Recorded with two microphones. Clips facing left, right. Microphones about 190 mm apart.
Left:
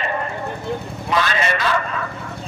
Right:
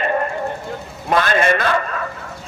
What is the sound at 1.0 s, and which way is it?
Speech, 50° right (ahead or behind).